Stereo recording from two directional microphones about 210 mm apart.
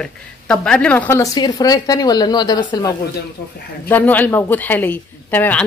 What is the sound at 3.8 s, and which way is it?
A woman's voice, 10° left (ahead or behind).